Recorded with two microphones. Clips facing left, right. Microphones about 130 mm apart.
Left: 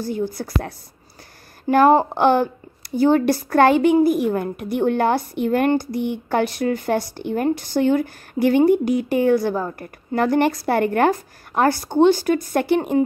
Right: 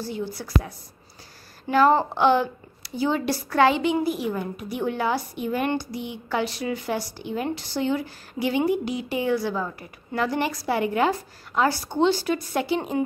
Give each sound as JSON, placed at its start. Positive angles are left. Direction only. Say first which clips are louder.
{"t": 0.4, "sound": "a woman's voice", "louder": "left 1 dB", "side_deg": 60}